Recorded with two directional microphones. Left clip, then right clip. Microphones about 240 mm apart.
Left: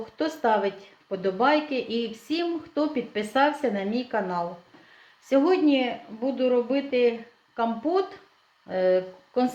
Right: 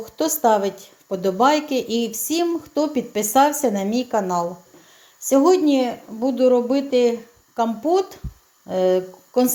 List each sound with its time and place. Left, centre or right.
0.2 s a woman's voice: right